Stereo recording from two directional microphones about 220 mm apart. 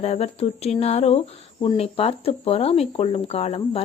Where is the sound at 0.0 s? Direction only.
30° left (ahead or behind).